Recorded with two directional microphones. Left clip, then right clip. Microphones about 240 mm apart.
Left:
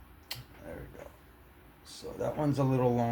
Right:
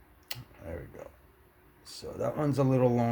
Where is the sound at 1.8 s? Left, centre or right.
Right.